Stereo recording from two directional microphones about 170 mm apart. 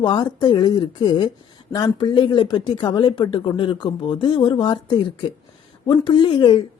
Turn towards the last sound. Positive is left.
turn(degrees=25)  # may be behind; listen again after turning